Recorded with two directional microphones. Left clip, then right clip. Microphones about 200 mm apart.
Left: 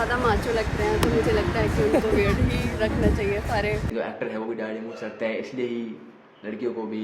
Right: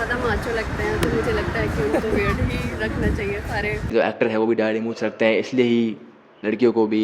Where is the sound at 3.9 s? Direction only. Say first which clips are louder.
Right 9 dB; 40° right (ahead or behind).